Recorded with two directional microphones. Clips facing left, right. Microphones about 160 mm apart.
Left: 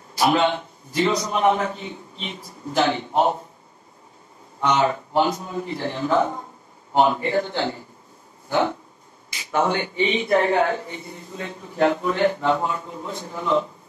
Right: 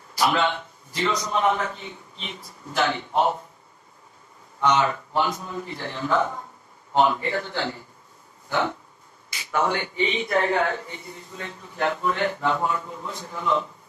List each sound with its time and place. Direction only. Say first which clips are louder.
0.2 s a man's voice: left 3 dB; 30° left (ahead or behind)
4.6 s a man's voice: left 1 dB; 30° left (ahead or behind)
9.5 s speech: left 3 dB; 25° left (ahead or behind)